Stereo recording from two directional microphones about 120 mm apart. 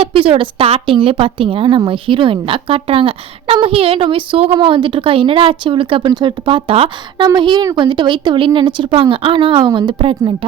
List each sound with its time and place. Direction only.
0.0 s a woman's voice: 50° right (ahead or behind)
7.3 s a woman's voice: 40° right (ahead or behind)